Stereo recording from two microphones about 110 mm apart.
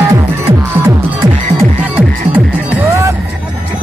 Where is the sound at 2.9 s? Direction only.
30° right (ahead or behind).